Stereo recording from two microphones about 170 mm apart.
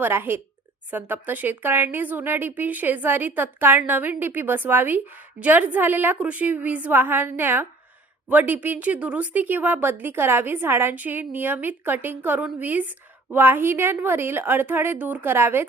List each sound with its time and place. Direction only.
0.0 s a woman's voice: 10° right (ahead or behind)